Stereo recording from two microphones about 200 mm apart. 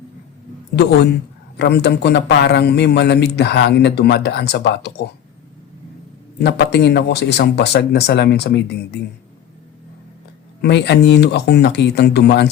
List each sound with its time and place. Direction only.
0.8 s a man's voice: 55° left (ahead or behind)
6.4 s a man's voice: 60° left (ahead or behind)
10.6 s a man's voice: 60° left (ahead or behind)